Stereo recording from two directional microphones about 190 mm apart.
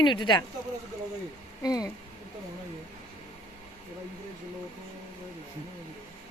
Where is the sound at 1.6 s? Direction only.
20° left (ahead or behind).